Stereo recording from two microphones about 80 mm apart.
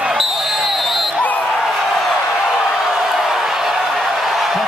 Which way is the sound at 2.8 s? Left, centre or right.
Centre.